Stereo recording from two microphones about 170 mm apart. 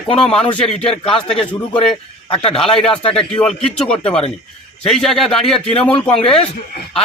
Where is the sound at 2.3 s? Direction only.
30° left (ahead or behind).